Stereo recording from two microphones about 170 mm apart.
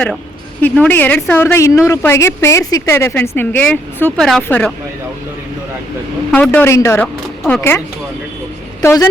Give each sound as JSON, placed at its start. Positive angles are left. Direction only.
{"t": 0.6, "sound": "a woman's voice", "side_deg": 10}
{"t": 6.3, "sound": "a woman's voice", "side_deg": 10}
{"t": 8.8, "sound": "speech", "side_deg": 15}